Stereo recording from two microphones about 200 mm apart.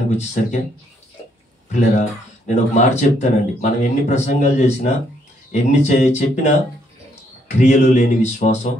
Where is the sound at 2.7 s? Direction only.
35° left (ahead or behind).